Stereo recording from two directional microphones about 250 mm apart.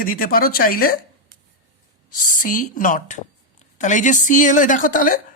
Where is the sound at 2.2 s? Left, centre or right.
Left.